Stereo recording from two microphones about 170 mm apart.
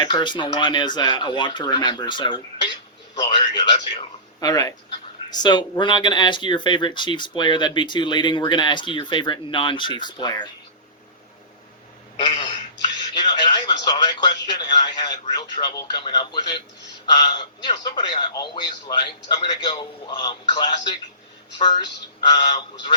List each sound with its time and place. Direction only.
0.0 s a man's voice: 25° left (ahead or behind)
13.1 s speech: 25° left (ahead or behind)